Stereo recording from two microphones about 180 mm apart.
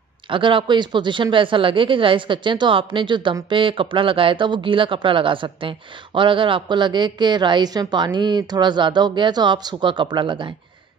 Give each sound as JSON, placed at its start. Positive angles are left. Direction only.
{"t": 0.3, "sound": "speech", "side_deg": -30}